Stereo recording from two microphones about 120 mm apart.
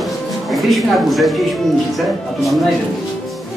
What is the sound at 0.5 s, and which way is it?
Speech, centre (ahead or behind).